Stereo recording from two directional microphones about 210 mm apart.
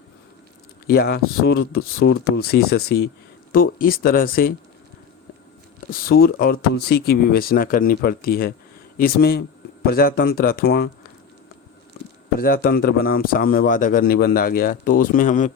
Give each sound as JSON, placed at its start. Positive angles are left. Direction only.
{"t": 0.9, "sound": "a man's voice", "side_deg": 50}
{"t": 5.9, "sound": "a man's voice", "side_deg": 45}
{"t": 12.4, "sound": "a man's voice", "side_deg": 45}